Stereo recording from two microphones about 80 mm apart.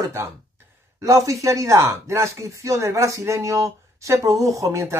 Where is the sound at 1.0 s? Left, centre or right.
Right.